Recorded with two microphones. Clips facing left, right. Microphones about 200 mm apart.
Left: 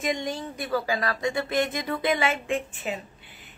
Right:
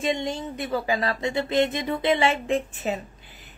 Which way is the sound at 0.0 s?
25° right (ahead or behind).